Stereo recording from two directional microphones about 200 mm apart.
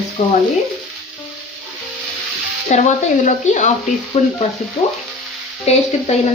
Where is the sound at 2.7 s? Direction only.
35° left (ahead or behind).